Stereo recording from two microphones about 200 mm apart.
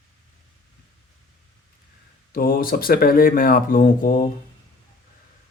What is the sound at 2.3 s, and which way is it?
Speech, 45° left (ahead or behind).